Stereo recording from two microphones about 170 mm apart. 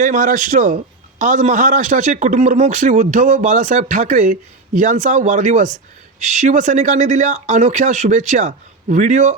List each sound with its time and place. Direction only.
0.0 s a man's voice: 50° right (ahead or behind)